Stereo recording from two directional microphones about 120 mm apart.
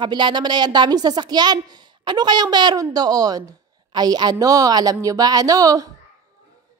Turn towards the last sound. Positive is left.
turn(degrees=-30)  # may be behind; listen again after turning